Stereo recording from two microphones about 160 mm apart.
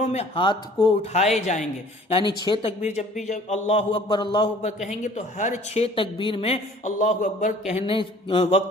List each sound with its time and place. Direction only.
0.0 s speech: 45° left (ahead or behind)
0.4 s a man's voice: 30° left (ahead or behind)
1.5 s a woman's voice: 45° left (ahead or behind)
2.0 s a man's voice: 35° left (ahead or behind)
4.9 s a woman's voice: 50° left (ahead or behind)